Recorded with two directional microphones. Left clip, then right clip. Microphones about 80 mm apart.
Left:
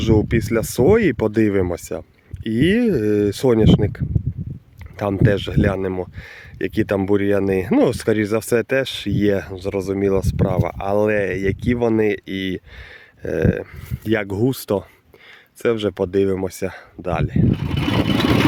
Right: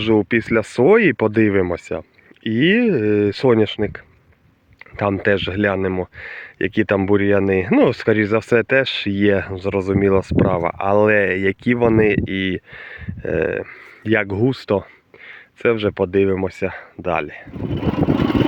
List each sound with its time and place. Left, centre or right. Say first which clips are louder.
0.0 s speech: right 2 dB; left
17.0 s speech: right 2 dB; left